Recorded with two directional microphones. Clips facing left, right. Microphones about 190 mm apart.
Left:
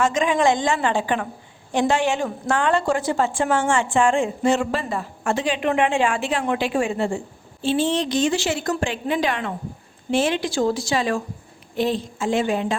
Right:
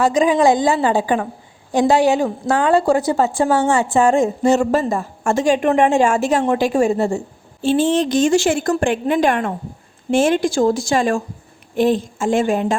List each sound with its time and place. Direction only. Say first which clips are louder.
0.0 s a woman's voice: right 5 dB; 35° right (ahead or behind)